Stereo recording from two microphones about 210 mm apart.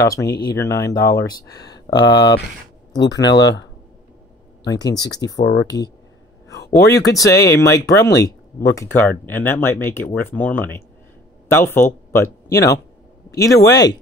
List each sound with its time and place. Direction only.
0.0 s speech: 15° left (ahead or behind)
4.6 s speech: 20° left (ahead or behind)
5.4 s speech: 55° left (ahead or behind)
7.0 s speech: 15° left (ahead or behind)
8.2 s a sound: 15° left (ahead or behind)
8.7 s speech: 10° left (ahead or behind)